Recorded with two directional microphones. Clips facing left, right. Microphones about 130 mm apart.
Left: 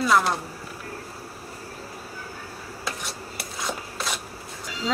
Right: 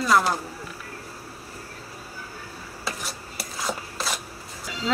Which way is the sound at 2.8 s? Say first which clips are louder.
Even; centre (ahead or behind).